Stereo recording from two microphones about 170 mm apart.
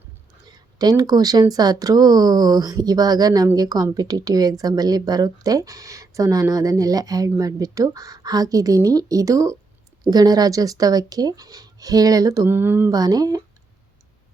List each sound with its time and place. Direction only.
0.4 s speech: 25° right (ahead or behind)